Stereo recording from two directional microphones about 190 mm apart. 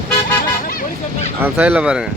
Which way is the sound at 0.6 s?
40° left (ahead or behind).